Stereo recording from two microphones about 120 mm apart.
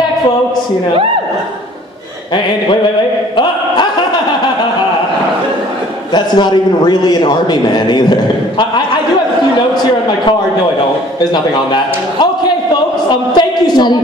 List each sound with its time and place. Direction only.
6.1 s a man's voice: 40° left (ahead or behind)
11.1 s a man's voice: 40° left (ahead or behind)
13.3 s a man's voice: 35° left (ahead or behind)